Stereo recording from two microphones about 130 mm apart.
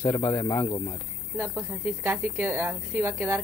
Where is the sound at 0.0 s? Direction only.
20° left (ahead or behind).